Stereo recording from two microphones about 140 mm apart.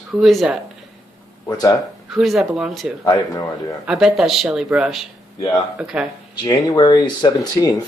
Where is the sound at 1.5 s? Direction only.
25° left (ahead or behind).